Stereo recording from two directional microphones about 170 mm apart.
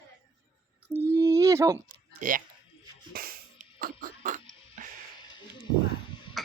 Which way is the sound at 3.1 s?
60° right (ahead or behind).